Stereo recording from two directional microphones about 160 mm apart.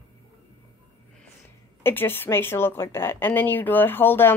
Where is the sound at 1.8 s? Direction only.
15° left (ahead or behind).